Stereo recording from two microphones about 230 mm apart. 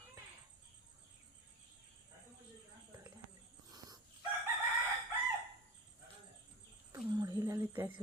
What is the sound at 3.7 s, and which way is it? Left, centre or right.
Dog, centre.